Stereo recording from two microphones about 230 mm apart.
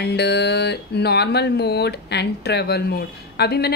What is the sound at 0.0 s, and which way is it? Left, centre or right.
Speech, left.